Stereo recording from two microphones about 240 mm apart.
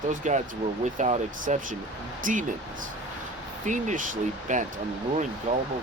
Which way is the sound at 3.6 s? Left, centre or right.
Right.